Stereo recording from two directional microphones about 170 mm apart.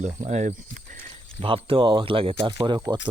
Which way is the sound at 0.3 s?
45° right (ahead or behind).